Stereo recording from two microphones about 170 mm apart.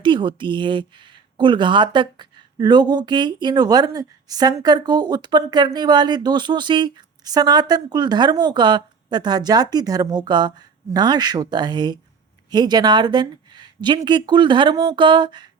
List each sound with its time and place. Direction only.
0.0 s speech: 30° right (ahead or behind)